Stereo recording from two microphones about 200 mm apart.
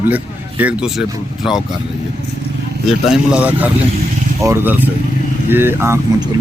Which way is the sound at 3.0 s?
5° right (ahead or behind).